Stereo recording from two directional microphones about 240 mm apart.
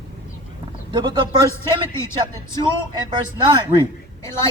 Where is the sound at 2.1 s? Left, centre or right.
Centre.